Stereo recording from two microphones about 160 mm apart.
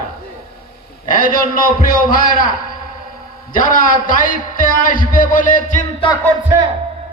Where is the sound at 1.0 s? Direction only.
60° left (ahead or behind).